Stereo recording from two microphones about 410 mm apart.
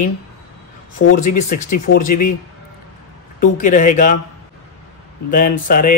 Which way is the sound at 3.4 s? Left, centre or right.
Centre.